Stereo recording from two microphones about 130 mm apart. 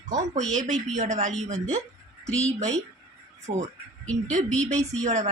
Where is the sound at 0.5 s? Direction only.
65° right (ahead or behind).